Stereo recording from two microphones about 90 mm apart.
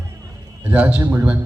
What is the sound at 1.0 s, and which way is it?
Speech, 30° right (ahead or behind).